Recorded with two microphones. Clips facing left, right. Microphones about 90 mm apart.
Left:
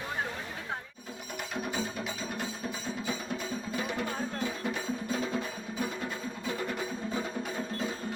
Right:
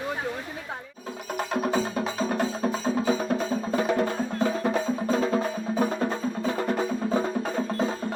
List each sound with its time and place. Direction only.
1.4 s music: 45° right (ahead or behind)